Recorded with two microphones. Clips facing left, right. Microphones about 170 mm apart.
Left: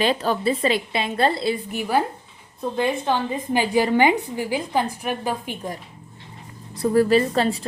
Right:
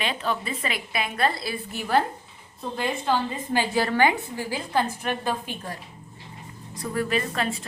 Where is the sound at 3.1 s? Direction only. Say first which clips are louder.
Left 2 dB; 15° left (ahead or behind).